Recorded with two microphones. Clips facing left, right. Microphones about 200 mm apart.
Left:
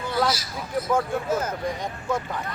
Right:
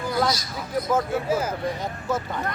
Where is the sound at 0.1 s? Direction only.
5° left (ahead or behind).